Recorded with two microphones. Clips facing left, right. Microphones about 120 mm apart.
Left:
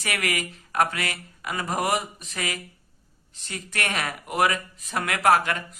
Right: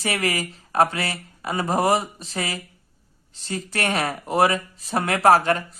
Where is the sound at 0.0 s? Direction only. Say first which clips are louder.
Right 4 dB; 30° right (ahead or behind).